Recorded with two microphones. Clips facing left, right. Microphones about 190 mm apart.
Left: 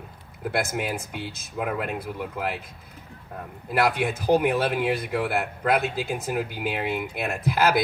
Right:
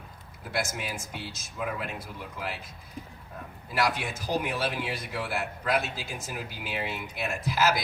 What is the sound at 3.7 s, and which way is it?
Speech, 55° left (ahead or behind).